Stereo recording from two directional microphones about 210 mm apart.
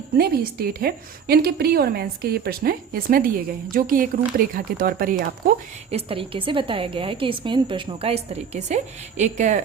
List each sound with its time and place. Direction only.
0.2 s a woman's voice: 45° right (ahead or behind)
5.9 s a woman's voice: 25° right (ahead or behind)